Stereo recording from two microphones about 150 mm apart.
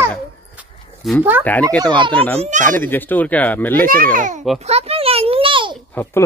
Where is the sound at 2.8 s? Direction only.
15° left (ahead or behind).